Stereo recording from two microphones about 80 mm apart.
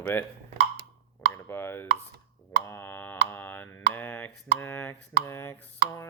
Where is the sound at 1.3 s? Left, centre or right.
Left.